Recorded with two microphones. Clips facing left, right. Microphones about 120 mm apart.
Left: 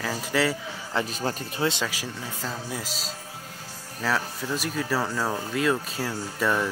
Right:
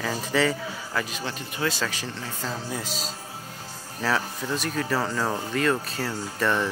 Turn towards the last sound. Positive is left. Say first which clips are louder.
# even
turn(degrees=10)  # may be behind; listen again after turning